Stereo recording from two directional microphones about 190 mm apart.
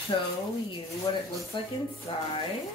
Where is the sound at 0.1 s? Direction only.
25° left (ahead or behind).